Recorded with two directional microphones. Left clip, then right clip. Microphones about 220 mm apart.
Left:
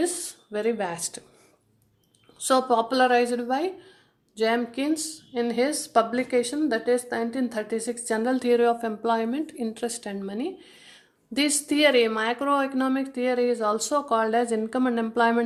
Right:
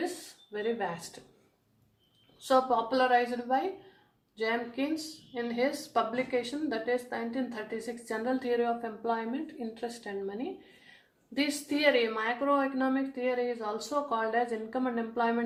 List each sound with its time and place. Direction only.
0.5 s a woman's voice: 50° left (ahead or behind)
2.4 s a woman's voice: 50° left (ahead or behind)